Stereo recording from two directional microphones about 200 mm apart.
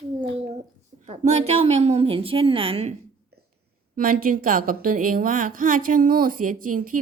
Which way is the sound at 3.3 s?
50° right (ahead or behind).